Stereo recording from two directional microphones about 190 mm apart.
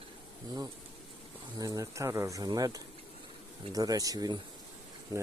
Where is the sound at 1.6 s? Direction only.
15° right (ahead or behind).